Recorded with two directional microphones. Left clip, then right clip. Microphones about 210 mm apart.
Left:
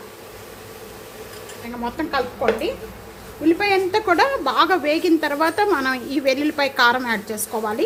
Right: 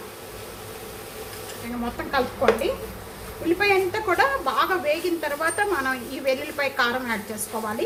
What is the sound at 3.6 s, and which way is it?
A woman's voice, 40° left (ahead or behind).